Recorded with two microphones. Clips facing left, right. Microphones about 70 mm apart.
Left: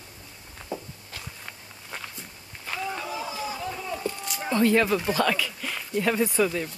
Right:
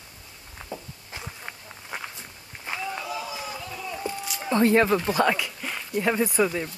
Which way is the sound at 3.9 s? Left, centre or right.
Centre.